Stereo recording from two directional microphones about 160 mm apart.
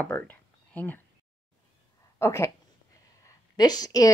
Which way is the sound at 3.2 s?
20° left (ahead or behind).